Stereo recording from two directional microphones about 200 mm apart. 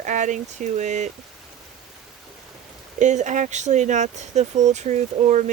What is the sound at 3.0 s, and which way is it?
Speech, 35° right (ahead or behind).